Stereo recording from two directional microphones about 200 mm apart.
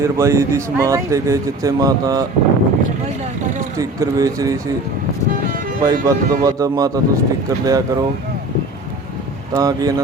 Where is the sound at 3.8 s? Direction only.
15° right (ahead or behind).